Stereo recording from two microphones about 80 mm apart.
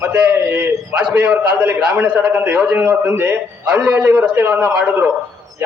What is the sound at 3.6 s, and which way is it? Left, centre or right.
A man's voice, centre.